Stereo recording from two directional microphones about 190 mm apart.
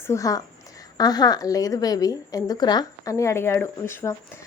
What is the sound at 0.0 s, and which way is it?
A woman's voice, 15° left (ahead or behind).